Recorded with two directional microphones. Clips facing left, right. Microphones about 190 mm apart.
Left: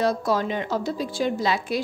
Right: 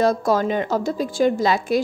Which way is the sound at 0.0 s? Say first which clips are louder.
Right 4 dB; 45° right (ahead or behind).